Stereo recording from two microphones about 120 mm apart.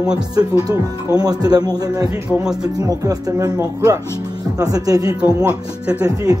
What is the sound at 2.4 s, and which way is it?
Speech, 5° right (ahead or behind).